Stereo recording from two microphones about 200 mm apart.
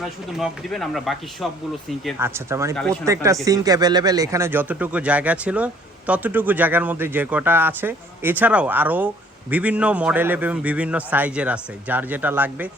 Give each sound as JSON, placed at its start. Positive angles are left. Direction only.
{"t": 0.0, "sound": "speech", "side_deg": 0}
{"t": 2.1, "sound": "speech", "side_deg": -10}